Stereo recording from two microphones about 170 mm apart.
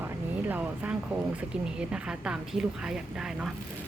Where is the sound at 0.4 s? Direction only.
10° right (ahead or behind).